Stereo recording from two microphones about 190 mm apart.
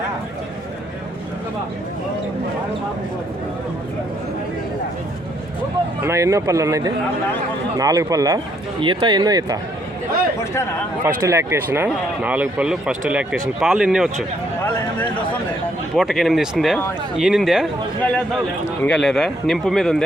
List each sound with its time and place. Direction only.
6.0 s speech: 15° right (ahead or behind)
11.0 s speech: 15° right (ahead or behind)
16.0 s speech: centre (ahead or behind)
18.6 s speech: 10° left (ahead or behind)